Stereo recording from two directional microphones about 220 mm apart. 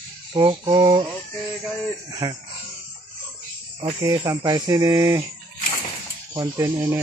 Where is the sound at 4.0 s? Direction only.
15° right (ahead or behind).